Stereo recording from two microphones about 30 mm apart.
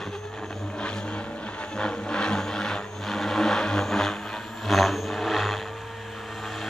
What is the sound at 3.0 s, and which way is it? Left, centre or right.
Vehicle, centre.